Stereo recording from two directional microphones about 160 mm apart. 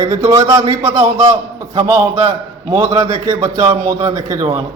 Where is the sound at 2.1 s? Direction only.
45° right (ahead or behind).